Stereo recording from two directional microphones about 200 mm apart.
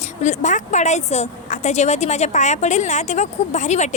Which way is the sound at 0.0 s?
35° left (ahead or behind).